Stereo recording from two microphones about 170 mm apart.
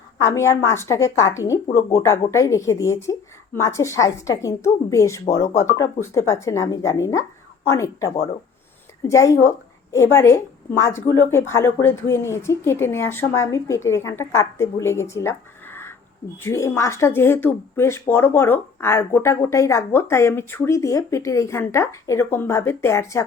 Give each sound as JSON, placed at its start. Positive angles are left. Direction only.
{"t": 0.2, "sound": "speech", "side_deg": 15}